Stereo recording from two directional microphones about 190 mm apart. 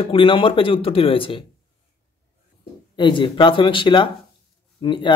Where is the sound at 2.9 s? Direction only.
25° left (ahead or behind).